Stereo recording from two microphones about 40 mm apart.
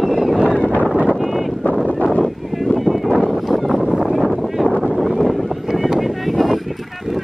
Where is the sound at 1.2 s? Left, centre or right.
Centre.